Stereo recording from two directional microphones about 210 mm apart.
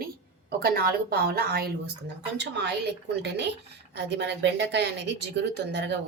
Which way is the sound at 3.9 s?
55° right (ahead or behind).